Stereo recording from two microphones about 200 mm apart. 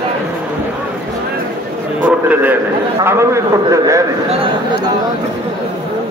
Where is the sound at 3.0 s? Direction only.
15° right (ahead or behind).